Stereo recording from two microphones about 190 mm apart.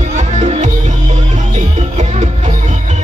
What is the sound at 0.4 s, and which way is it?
Music, 40° right (ahead or behind).